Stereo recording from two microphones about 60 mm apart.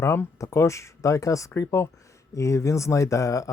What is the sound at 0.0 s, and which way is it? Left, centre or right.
Speech, left.